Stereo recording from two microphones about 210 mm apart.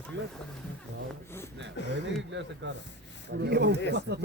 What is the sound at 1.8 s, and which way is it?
Speech, 55° left (ahead or behind).